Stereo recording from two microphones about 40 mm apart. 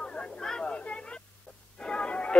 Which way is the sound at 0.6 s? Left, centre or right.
Left.